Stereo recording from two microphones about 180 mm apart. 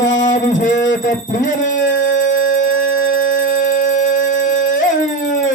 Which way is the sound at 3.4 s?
50° left (ahead or behind).